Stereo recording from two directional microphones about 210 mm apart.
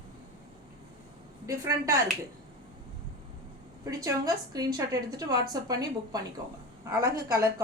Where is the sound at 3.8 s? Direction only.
15° right (ahead or behind).